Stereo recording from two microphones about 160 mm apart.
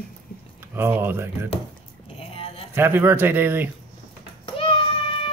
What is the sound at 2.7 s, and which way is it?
Speech, 15° right (ahead or behind).